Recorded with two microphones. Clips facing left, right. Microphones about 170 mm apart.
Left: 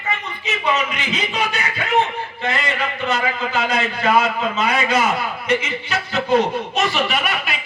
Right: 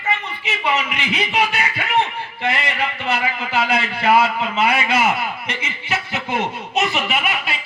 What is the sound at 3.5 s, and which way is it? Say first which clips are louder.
A man's voice: right 4 dB; 30° right (ahead or behind).